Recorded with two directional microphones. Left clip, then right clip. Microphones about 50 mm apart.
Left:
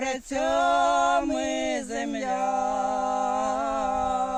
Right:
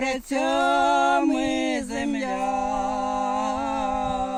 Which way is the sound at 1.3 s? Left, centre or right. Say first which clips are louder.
Right 2 dB; left.